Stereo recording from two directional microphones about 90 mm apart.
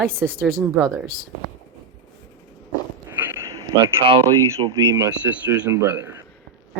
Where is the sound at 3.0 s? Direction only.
25° right (ahead or behind).